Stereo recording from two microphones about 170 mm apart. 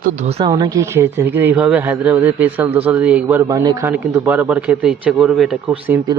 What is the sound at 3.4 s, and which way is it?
Speech, 20° right (ahead or behind).